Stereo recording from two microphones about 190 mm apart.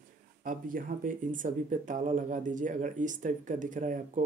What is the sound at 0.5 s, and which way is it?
A man's voice, 45° right (ahead or behind).